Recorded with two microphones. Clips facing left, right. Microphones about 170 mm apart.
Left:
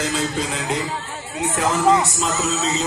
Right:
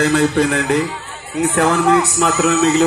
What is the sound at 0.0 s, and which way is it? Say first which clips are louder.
A man's voice: right 9 dB; 65° right (ahead or behind).